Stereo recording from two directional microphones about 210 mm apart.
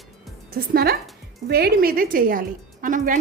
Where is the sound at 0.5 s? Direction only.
45° right (ahead or behind).